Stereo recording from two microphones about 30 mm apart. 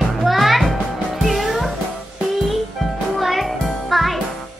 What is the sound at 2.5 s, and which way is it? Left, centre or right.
Music, centre.